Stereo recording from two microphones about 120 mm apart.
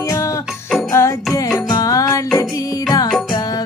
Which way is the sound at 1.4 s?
30° left (ahead or behind).